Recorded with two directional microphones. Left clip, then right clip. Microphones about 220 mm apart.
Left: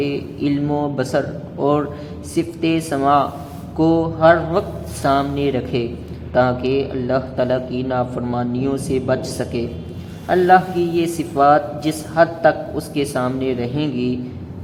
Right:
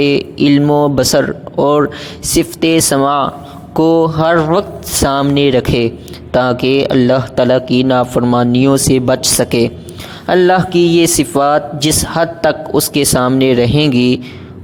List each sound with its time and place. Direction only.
0.0 s speech: 45° right (ahead or behind)